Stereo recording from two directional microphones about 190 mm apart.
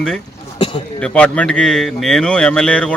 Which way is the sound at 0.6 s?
25° left (ahead or behind).